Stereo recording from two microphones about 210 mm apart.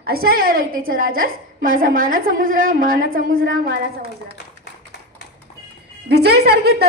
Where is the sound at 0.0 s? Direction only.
45° right (ahead or behind).